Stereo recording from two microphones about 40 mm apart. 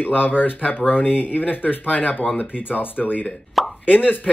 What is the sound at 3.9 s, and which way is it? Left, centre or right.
Speech, left.